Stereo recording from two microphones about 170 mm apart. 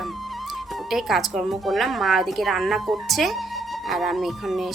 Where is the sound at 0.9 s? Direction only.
Centre (ahead or behind).